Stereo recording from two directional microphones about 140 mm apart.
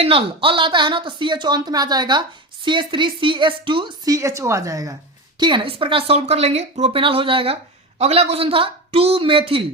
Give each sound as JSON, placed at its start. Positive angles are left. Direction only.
{"t": 0.0, "sound": "speech", "side_deg": -40}
{"t": 5.4, "sound": "speech", "side_deg": -35}